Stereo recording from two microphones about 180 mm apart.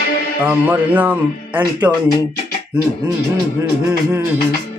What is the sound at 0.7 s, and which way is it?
Speech, 10° right (ahead or behind).